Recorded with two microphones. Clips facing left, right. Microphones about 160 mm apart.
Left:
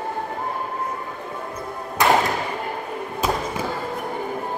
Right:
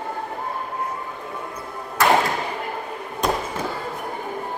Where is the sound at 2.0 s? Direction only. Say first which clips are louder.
Even; 20° left (ahead or behind).